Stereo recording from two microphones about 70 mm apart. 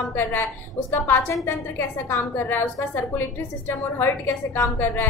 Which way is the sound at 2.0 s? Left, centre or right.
Left.